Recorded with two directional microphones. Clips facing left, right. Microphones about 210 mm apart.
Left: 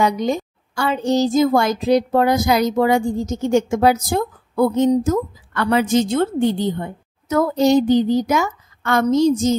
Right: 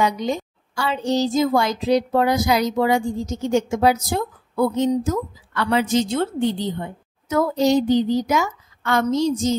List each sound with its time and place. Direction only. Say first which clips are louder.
0.0 s a woman's voice: left 3 dB; 50° left (ahead or behind)